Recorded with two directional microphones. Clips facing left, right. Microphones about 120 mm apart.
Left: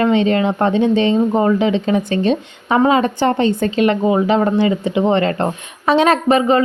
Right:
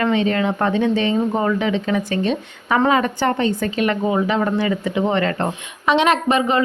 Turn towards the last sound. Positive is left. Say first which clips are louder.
# left 4 dB
turn(degrees=35)  # may be behind; listen again after turning